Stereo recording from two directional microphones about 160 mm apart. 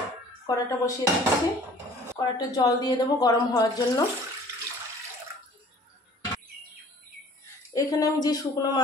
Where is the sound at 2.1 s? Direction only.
25° left (ahead or behind).